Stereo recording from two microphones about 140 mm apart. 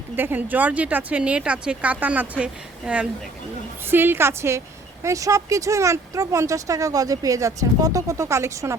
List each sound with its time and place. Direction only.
0.2 s speech: 15° right (ahead or behind)